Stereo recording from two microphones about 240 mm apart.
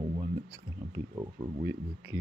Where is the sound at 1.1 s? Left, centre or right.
Centre.